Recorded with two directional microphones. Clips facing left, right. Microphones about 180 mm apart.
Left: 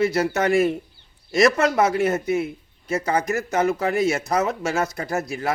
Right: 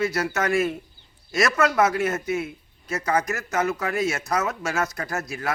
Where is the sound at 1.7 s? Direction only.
30° left (ahead or behind).